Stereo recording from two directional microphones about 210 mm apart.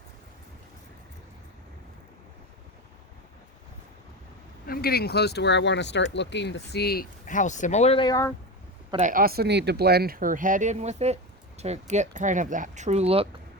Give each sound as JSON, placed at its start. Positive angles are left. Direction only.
{"t": 4.6, "sound": "speech", "side_deg": 45}
{"t": 9.0, "sound": "speech", "side_deg": -40}